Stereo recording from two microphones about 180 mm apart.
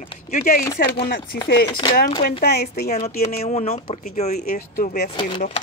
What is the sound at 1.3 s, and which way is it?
Speech, 60° left (ahead or behind).